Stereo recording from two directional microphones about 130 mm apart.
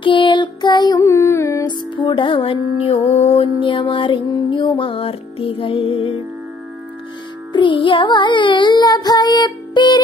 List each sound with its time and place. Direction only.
0.0 s music: 35° left (ahead or behind); by 1.7 s 20° left (ahead or behind)
1.7 s music: 35° left (ahead or behind)
3.5 s music: 40° left (ahead or behind)
7.5 s music: 40° left (ahead or behind)